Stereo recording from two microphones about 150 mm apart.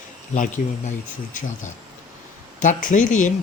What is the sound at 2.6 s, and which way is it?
Speech, 60° left (ahead or behind).